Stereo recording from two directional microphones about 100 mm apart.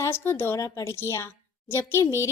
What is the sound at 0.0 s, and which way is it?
A woman's voice, 25° left (ahead or behind).